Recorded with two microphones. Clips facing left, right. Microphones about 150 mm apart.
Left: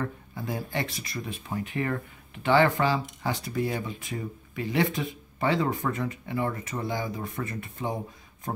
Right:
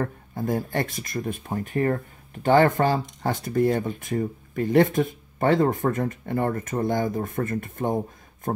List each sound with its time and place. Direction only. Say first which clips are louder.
0.0 s speech: right 5 dB; 45° right (ahead or behind)